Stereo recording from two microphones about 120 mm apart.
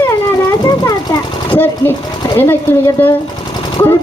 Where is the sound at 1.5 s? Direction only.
15° left (ahead or behind).